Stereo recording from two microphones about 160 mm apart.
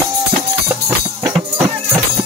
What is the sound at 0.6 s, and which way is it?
Music, 15° right (ahead or behind).